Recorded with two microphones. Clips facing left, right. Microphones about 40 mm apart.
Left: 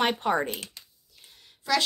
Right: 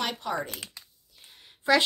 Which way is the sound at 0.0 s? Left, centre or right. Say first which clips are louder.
Left 6 dB; left.